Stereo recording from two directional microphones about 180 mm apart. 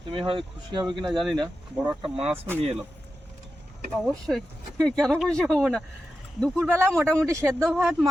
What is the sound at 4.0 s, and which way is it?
Speech, centre (ahead or behind).